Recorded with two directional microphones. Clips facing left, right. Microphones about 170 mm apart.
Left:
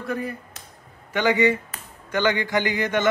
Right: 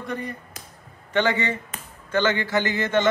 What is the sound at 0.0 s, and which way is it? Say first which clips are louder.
A man's voice: left 2 dB; 5° left (ahead or behind).